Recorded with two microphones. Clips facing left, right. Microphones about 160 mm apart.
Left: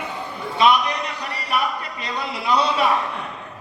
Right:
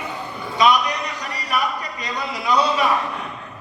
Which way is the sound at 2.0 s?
30° left (ahead or behind).